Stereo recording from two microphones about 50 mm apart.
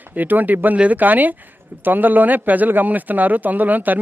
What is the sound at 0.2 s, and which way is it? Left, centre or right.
Speech, right.